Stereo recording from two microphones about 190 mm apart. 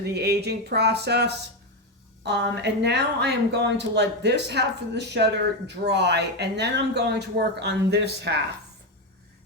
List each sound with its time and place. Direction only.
0.1 s a woman's voice: 60° right (ahead or behind)